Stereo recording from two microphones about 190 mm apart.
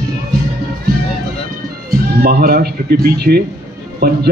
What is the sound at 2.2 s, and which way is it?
Speech, 55° right (ahead or behind).